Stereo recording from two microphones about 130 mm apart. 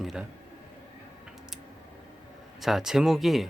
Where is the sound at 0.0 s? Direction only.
5° right (ahead or behind).